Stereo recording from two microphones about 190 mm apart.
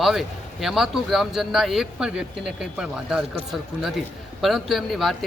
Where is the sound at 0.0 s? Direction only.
Centre (ahead or behind).